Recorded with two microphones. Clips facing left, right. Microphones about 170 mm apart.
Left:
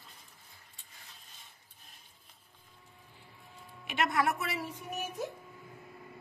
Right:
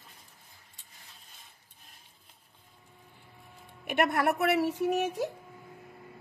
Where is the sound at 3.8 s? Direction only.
60° right (ahead or behind); by 5.2 s 75° right (ahead or behind).